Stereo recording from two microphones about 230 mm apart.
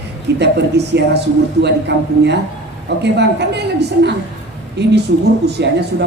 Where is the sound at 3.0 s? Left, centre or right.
Right.